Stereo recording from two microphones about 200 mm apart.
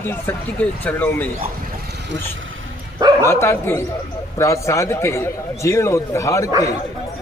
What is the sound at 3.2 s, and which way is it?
A man's voice, 15° left (ahead or behind).